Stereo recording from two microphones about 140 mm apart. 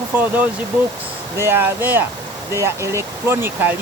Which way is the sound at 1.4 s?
15° right (ahead or behind).